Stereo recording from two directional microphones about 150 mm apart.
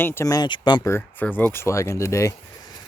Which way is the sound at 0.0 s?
15° left (ahead or behind).